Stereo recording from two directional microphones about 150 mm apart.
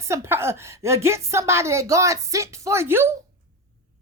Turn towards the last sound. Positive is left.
turn(degrees=-15)  # may be behind; listen again after turning